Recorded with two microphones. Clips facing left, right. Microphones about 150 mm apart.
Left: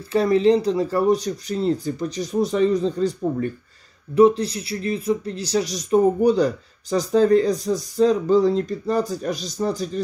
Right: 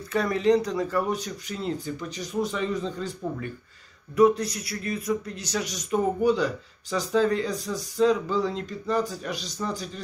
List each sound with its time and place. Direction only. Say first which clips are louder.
0.1 s speech: left 5 dB; 30° left (ahead or behind)